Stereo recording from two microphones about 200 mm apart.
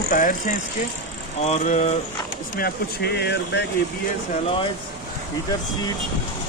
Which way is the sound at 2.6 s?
55° left (ahead or behind).